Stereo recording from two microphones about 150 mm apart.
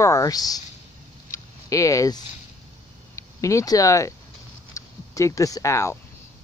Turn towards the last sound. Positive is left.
turn(degrees=20)  # may be behind; listen again after turning